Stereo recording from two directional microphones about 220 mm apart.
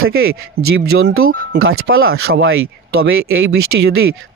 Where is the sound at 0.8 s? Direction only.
55° right (ahead or behind).